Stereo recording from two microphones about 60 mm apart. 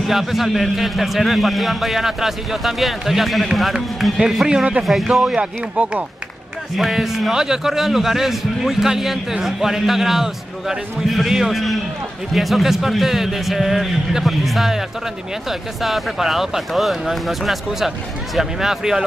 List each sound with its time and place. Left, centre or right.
0.0 s a man's voice: centre
5.2 s speech: centre
6.8 s a man's voice: centre
15.8 s a man's voice: centre